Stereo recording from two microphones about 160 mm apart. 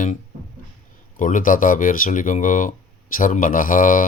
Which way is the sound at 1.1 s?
55° left (ahead or behind).